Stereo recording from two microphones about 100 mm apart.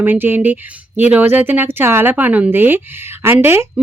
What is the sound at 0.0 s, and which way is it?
Speech, 20° right (ahead or behind).